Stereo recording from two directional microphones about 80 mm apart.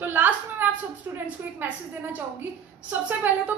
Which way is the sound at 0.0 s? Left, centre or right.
Right.